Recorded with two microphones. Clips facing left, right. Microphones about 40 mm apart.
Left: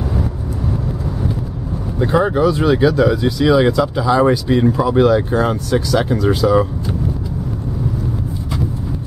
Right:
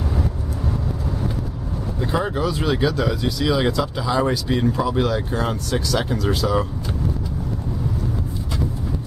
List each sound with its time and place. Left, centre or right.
2.0 s speech: centre